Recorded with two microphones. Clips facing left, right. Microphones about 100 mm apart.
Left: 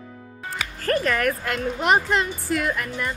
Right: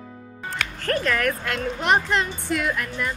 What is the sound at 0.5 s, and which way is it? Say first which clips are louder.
Speech: left 2 dB; 5° left (ahead or behind).